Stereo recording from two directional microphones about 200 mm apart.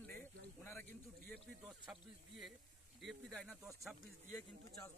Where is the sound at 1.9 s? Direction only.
Centre (ahead or behind).